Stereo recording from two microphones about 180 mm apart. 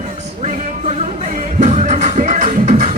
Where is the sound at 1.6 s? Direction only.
40° right (ahead or behind).